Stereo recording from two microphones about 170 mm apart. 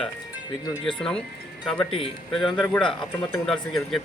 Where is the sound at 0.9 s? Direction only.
5° left (ahead or behind).